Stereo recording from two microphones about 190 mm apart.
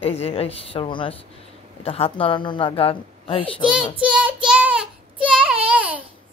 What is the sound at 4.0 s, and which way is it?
Child singing, 5° right (ahead or behind).